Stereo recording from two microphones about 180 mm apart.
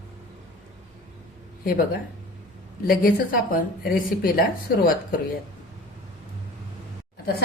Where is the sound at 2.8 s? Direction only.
50° left (ahead or behind).